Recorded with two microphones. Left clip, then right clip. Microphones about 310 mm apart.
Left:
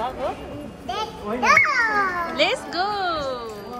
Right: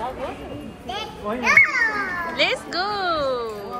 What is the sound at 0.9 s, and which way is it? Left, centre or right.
Children playing, left.